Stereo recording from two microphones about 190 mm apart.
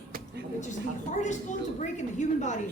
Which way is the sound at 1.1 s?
40° left (ahead or behind).